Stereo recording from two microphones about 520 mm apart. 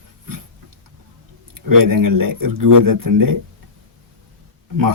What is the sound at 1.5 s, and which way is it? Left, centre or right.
A man's voice, right.